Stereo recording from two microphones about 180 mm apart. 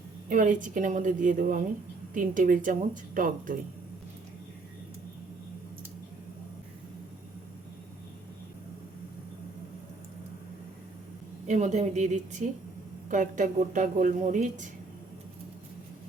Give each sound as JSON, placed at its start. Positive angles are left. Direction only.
{"t": 0.3, "sound": "speech", "side_deg": -45}
{"t": 11.4, "sound": "a woman's voice", "side_deg": -40}